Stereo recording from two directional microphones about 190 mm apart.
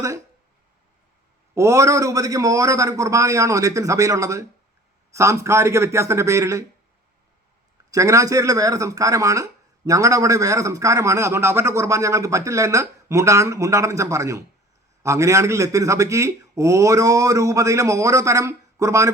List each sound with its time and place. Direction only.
1.5 s speech: 15° right (ahead or behind)
7.9 s speech: 15° right (ahead or behind)